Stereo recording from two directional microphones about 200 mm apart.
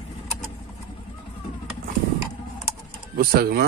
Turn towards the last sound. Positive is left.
turn(degrees=-50)  # may be behind; listen again after turning